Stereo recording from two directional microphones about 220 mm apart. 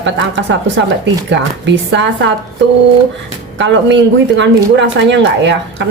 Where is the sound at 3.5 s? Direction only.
55° right (ahead or behind).